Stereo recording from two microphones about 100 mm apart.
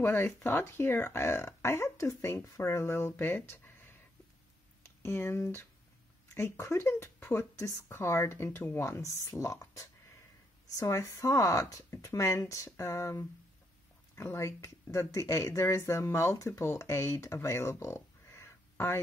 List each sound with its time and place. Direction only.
0.0 s speech: 20° left (ahead or behind)
5.0 s speech: 25° left (ahead or behind)